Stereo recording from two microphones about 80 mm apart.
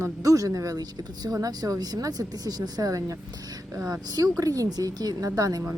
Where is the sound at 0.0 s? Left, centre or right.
Right.